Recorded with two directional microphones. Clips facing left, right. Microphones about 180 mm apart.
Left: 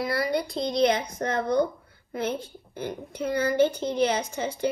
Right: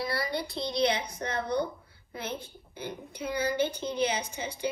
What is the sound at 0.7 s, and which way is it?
Speech, 55° left (ahead or behind).